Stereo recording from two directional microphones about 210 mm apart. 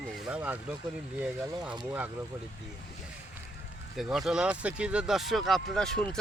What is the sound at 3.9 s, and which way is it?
Speech, centre (ahead or behind).